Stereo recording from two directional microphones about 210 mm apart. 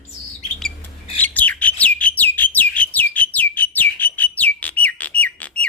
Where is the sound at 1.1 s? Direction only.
10° left (ahead or behind).